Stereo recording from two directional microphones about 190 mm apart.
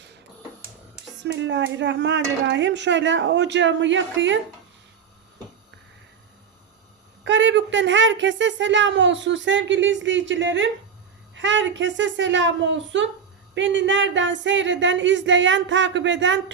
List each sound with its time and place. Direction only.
1.2 s speech: 70° right (ahead or behind)
7.3 s speech: 75° right (ahead or behind)